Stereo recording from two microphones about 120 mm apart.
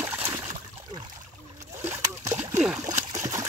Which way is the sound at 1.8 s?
20° right (ahead or behind).